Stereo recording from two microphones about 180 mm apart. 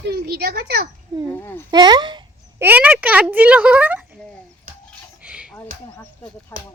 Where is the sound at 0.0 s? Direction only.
65° right (ahead or behind).